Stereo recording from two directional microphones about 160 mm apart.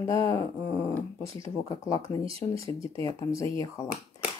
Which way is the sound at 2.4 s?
35° left (ahead or behind).